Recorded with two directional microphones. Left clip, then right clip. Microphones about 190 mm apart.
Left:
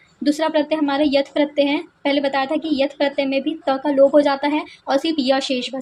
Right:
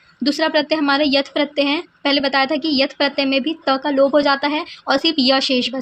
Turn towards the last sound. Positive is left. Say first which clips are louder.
# right 3 dB
turn(degrees=-20)  # may be behind; listen again after turning